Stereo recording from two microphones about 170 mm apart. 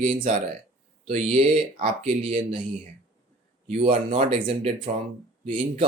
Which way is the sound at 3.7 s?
35° right (ahead or behind).